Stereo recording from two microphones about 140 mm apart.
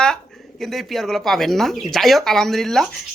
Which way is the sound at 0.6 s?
Centre (ahead or behind).